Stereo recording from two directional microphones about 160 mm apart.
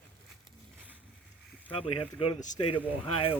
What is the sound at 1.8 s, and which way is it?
Speech, 35° left (ahead or behind).